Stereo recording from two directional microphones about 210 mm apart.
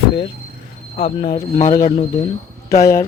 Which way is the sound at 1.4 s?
15° left (ahead or behind).